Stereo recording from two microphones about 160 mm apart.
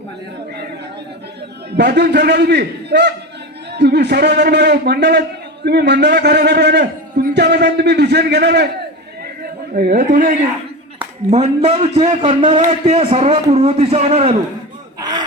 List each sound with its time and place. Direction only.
1.7 s a man's voice: 90° right
9.4 s a man's voice: 65° right (ahead or behind)
11.3 s a man's voice: 45° right (ahead or behind)